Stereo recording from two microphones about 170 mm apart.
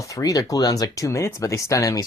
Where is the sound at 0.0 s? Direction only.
20° left (ahead or behind).